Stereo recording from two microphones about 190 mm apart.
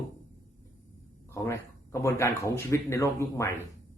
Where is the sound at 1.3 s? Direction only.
15° left (ahead or behind).